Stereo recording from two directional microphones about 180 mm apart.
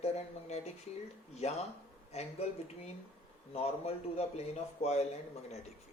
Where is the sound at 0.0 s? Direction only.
35° left (ahead or behind).